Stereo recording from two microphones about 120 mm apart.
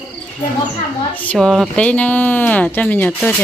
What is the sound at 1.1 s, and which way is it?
A woman's voice, 10° left (ahead or behind).